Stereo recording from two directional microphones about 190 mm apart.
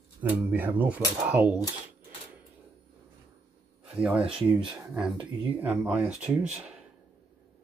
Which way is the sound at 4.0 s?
5° right (ahead or behind).